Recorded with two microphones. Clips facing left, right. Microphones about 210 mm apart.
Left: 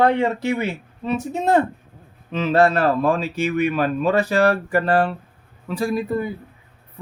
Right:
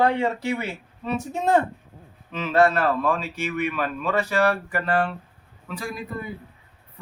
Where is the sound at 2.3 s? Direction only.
30° left (ahead or behind).